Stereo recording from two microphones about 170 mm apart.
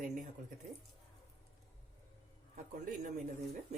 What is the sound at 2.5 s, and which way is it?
Speech, 50° right (ahead or behind).